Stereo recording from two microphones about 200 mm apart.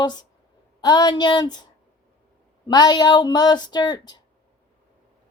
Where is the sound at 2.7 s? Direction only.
20° left (ahead or behind).